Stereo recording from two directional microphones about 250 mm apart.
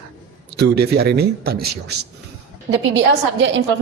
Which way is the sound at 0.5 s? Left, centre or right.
Right.